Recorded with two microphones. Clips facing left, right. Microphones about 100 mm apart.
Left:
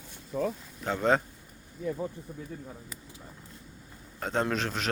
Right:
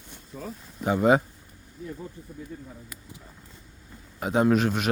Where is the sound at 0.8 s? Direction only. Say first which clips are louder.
Right 5 dB; 10° right (ahead or behind).